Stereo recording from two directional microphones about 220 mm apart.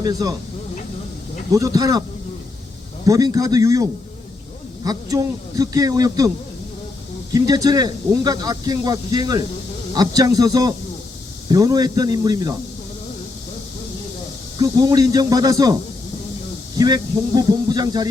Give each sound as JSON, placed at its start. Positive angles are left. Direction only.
{"t": 0.0, "sound": "speech", "side_deg": -15}
{"t": 1.5, "sound": "speech", "side_deg": -15}
{"t": 3.1, "sound": "speech", "side_deg": -15}
{"t": 7.3, "sound": "speech", "side_deg": -15}
{"t": 14.6, "sound": "speech", "side_deg": -15}